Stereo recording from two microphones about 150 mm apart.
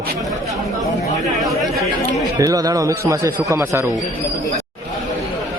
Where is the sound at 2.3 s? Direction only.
25° right (ahead or behind).